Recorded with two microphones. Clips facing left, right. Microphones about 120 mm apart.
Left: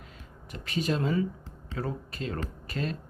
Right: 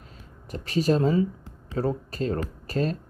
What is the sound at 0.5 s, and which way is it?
Speech, 35° right (ahead or behind).